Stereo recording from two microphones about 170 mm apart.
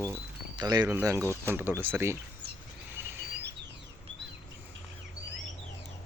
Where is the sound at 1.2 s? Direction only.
15° left (ahead or behind).